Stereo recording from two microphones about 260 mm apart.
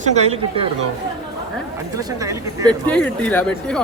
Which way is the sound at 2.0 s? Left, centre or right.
Centre.